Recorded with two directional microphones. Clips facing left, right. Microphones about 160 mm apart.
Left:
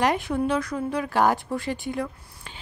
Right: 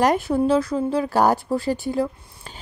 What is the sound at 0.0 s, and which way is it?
A woman's voice, 35° right (ahead or behind).